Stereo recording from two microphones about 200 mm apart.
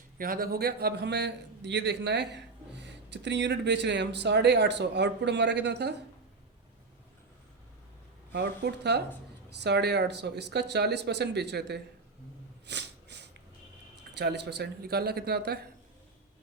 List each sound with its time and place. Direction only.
0.2 s a man's voice: 45° right (ahead or behind)
8.3 s a man's voice: 55° right (ahead or behind)
12.6 s snort: 60° right (ahead or behind)
14.1 s a man's voice: 55° right (ahead or behind)